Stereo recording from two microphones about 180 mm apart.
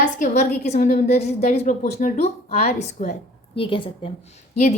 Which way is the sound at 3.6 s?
30° left (ahead or behind).